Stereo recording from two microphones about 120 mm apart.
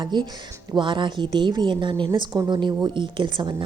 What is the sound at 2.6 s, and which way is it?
Speech, 40° right (ahead or behind).